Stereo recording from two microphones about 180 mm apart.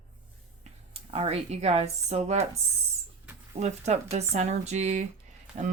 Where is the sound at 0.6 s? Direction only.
35° right (ahead or behind).